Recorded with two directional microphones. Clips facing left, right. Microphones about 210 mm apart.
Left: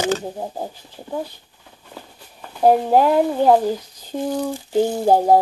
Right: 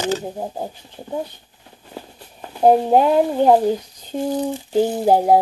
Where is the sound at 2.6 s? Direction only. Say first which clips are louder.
Right 1 dB; 20° right (ahead or behind).